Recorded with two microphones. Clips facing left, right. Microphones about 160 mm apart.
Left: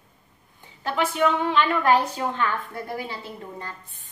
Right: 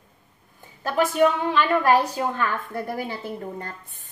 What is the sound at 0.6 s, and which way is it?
A woman's voice, 45° right (ahead or behind).